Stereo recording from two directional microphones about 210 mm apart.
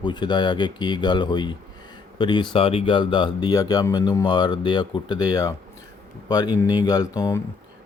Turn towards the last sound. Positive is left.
turn(degrees=20)  # may be behind; listen again after turning